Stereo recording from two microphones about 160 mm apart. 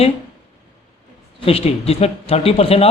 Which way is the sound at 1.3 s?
35° left (ahead or behind).